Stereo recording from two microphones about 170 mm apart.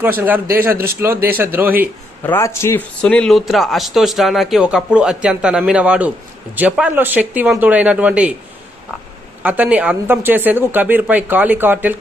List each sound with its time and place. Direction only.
0.0 s speech: 10° right (ahead or behind)
2.2 s a man's voice: 15° left (ahead or behind)
3.0 s speech: 5° left (ahead or behind)
9.4 s speech: 10° right (ahead or behind)